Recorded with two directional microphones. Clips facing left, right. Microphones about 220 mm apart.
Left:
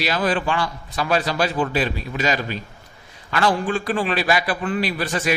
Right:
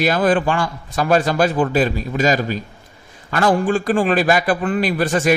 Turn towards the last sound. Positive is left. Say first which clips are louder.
# right 6 dB
turn(degrees=-50)  # may be behind; listen again after turning